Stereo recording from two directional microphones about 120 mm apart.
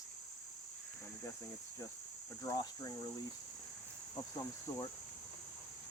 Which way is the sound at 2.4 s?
30° left (ahead or behind).